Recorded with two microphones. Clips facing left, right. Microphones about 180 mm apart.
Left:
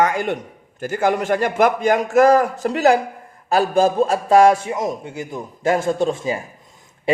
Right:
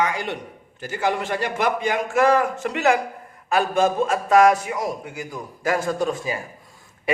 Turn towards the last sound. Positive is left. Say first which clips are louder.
# left 5 dB
turn(degrees=30)  # may be behind; listen again after turning